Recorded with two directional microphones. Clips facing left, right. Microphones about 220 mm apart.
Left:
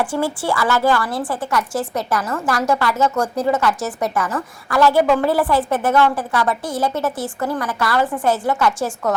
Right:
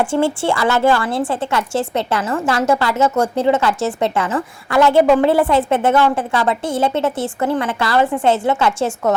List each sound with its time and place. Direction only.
0.0 s a woman's voice: 25° right (ahead or behind)